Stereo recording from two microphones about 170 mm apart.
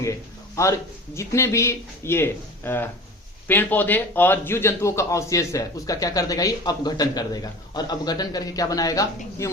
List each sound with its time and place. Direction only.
0.0 s a man's voice: 20° left (ahead or behind)